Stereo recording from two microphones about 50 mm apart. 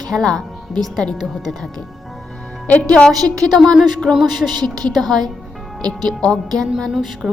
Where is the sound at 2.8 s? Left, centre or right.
Left.